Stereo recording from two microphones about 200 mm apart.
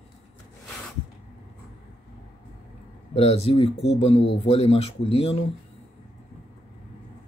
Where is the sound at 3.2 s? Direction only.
30° left (ahead or behind).